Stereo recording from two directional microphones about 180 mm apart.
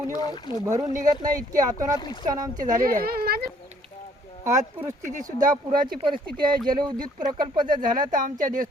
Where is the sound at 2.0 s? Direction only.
25° left (ahead or behind).